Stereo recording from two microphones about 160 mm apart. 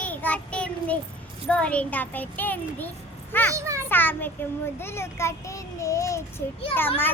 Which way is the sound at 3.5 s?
20° right (ahead or behind).